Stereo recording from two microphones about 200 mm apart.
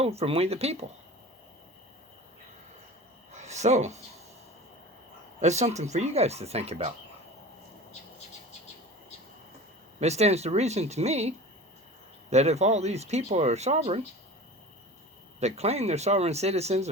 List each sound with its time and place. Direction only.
0.0 s speech: 30° right (ahead or behind)
3.3 s a sound: 35° right (ahead or behind)
5.4 s speech: 35° right (ahead or behind)
10.0 s speech: 35° right (ahead or behind)
15.4 s speech: 35° right (ahead or behind)